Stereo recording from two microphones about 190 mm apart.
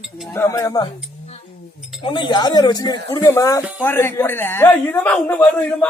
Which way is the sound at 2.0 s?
25° left (ahead or behind).